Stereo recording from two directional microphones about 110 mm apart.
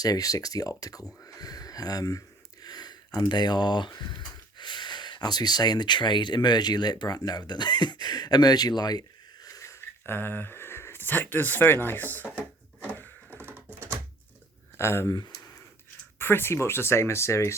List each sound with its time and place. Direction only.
0.0 s speech: 35° left (ahead or behind)
10.1 s speech: 20° left (ahead or behind)
13.3 s typing: 20° right (ahead or behind)
13.7 s a sound: 20° right (ahead or behind)
14.8 s speech: 25° left (ahead or behind)
16.1 s speech: 20° left (ahead or behind)